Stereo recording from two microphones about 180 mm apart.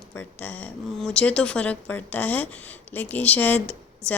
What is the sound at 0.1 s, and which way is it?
A woman's voice, 10° left (ahead or behind).